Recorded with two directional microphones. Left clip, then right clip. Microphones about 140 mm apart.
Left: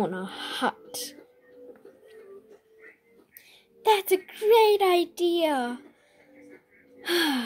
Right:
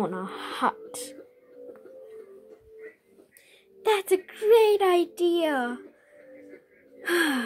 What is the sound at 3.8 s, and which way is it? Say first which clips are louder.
A woman's voice: left 1 dB; 15° left (ahead or behind).